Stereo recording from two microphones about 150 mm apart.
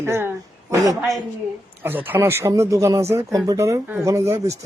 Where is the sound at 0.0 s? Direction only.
15° right (ahead or behind).